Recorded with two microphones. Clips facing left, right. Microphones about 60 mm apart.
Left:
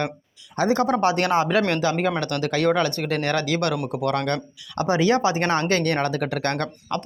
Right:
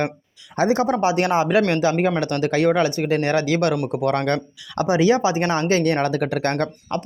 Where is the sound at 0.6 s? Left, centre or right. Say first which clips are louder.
Right 1 dB; centre; by 4.8 s right.